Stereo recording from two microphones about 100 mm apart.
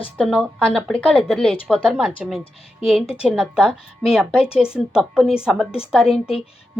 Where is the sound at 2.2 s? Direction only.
5° right (ahead or behind).